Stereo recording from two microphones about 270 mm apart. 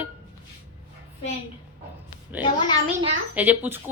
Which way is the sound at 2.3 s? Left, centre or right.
Centre.